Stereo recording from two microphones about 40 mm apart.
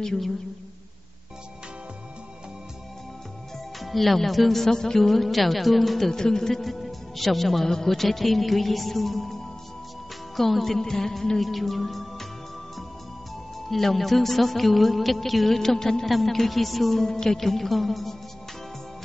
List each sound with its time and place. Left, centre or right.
3.8 s a man's voice: centre
13.7 s a man's voice: centre
17.0 s a man's voice: centre